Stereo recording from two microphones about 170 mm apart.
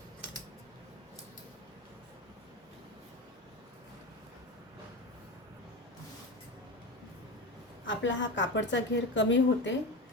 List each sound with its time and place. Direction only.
7.9 s a woman's voice: 90° left